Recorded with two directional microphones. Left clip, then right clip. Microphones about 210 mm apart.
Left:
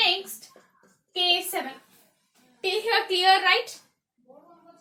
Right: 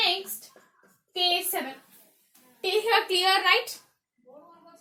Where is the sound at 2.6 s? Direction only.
15° right (ahead or behind).